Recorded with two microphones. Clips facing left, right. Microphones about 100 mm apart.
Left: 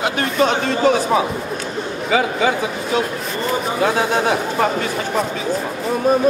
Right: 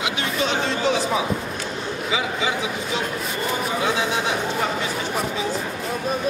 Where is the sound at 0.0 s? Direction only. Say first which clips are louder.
Left 7 dB; 45° left (ahead or behind).